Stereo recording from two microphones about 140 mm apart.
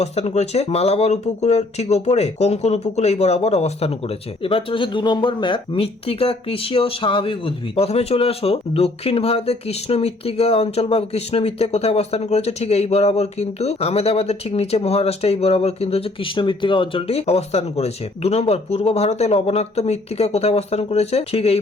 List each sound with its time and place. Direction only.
0.0 s speech: 50° left (ahead or behind)